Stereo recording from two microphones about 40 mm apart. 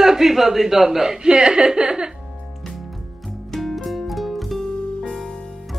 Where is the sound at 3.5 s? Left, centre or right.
Centre.